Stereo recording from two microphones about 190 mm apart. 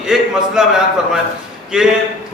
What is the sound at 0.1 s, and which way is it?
A man's voice, 5° right (ahead or behind).